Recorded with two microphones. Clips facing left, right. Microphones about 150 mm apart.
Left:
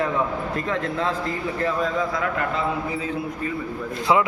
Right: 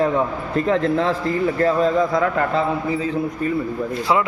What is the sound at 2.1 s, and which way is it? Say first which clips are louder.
Speech: right 6 dB; 35° right (ahead or behind).